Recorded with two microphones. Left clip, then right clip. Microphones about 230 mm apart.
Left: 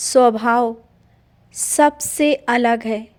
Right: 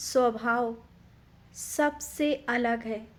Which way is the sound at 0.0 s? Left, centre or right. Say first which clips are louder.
Left 12 dB; left.